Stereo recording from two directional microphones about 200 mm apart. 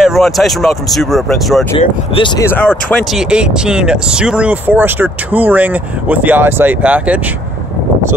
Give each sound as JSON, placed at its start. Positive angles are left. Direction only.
{"t": 0.0, "sound": "speech", "side_deg": 0}
{"t": 1.8, "sound": "speech", "side_deg": 25}
{"t": 2.4, "sound": "speech", "side_deg": 10}
{"t": 3.1, "sound": "speech", "side_deg": -5}